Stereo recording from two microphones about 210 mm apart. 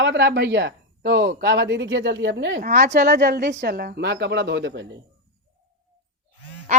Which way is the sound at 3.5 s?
50° right (ahead or behind).